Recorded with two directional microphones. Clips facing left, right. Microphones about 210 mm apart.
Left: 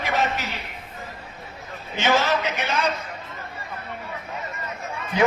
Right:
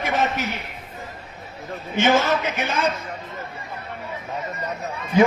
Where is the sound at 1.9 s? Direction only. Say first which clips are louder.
Right 3 dB; 50° right (ahead or behind).